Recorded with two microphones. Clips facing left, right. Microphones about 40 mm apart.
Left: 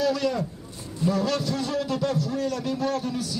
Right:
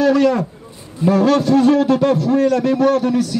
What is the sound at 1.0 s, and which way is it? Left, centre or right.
A man's voice, right.